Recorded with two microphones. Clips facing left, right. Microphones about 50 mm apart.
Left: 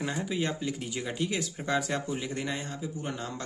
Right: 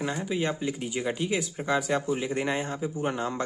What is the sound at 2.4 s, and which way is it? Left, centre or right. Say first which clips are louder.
Speech: right 6 dB; right.